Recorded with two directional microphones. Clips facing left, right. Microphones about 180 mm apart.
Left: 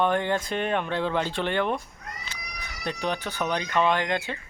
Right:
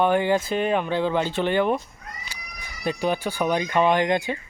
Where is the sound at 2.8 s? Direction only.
10° right (ahead or behind).